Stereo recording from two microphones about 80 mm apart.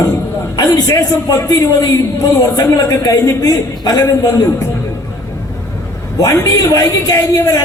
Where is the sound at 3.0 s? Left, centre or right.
Left.